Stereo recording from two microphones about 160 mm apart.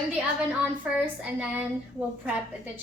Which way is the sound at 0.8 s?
5° right (ahead or behind).